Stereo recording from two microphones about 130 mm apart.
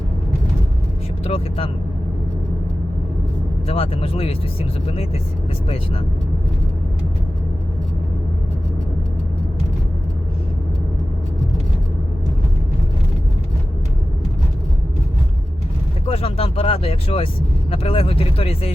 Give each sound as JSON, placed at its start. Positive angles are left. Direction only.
{"t": 1.2, "sound": "speech", "side_deg": 45}
{"t": 3.7, "sound": "speech", "side_deg": 50}
{"t": 16.0, "sound": "speech", "side_deg": 50}